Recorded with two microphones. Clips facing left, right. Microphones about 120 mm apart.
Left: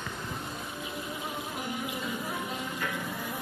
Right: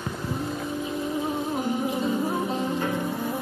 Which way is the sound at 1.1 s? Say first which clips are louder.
Right 10 dB; 35° right (ahead or behind).